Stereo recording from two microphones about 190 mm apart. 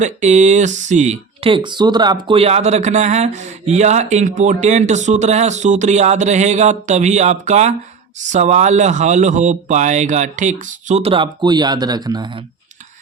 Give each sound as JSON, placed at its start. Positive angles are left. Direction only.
{"t": 0.0, "sound": "speech", "side_deg": -40}
{"t": 1.5, "sound": "speech", "side_deg": -25}